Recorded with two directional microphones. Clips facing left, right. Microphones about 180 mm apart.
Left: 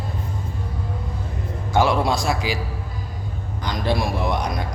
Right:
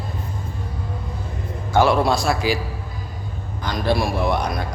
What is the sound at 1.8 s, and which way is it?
Mantra, 20° left (ahead or behind).